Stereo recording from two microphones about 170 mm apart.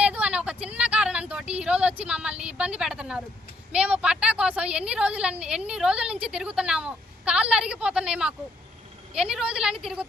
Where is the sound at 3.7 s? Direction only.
5° right (ahead or behind).